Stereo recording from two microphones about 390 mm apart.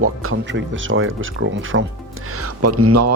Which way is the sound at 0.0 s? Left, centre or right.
Right.